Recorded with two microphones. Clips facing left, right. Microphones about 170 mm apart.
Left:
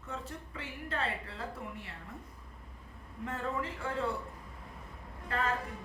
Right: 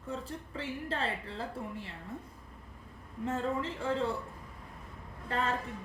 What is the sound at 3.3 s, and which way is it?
Speech, 25° right (ahead or behind).